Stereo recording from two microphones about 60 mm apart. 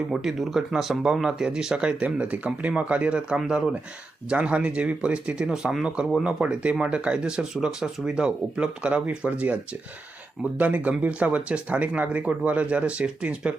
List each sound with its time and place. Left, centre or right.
0.1 s speech: centre; by 9.6 s right
10.6 s speech: right